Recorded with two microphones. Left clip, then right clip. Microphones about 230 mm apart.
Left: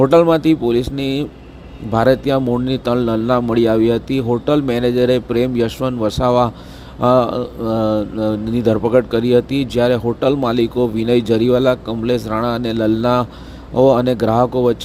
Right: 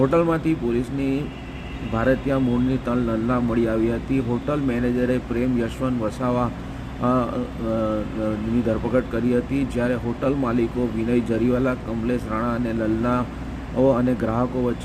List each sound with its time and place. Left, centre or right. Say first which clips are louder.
0.0 s speech: left 8 dB; left